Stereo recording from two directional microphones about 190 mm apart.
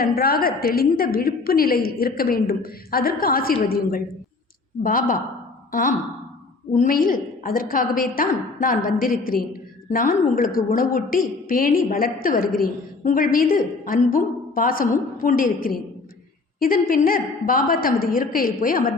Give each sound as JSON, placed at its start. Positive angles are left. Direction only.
{"t": 0.0, "sound": "a woman's voice", "side_deg": 50}
{"t": 6.7, "sound": "a woman's voice", "side_deg": 50}